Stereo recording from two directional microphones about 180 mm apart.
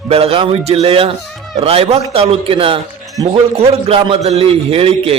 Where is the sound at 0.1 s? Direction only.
35° right (ahead or behind).